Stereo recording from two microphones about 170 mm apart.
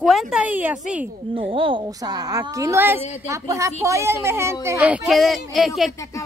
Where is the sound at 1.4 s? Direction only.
30° right (ahead or behind); by 5.9 s centre (ahead or behind).